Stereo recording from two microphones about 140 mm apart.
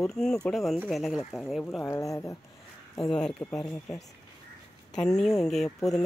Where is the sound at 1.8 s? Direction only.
20° left (ahead or behind).